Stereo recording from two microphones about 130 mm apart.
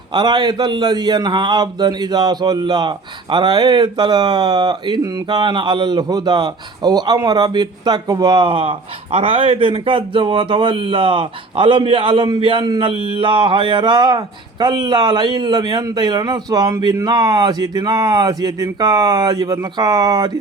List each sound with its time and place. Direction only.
0.1 s a man's voice: 35° right (ahead or behind)